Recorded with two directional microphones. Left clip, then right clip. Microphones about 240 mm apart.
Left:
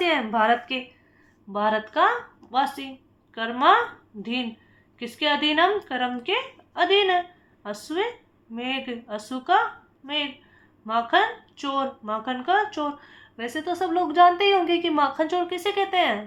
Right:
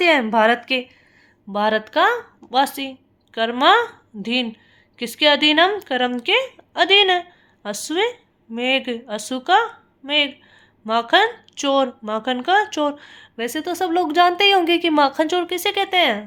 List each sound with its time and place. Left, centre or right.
0.0 s a woman's voice: right
10.8 s speech: right